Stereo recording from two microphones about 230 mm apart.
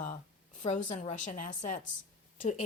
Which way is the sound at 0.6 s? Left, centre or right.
Left.